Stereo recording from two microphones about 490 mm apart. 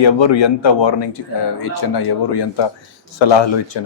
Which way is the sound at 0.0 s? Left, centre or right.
Left.